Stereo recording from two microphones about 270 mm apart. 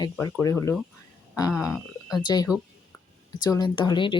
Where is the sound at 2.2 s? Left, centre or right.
Centre.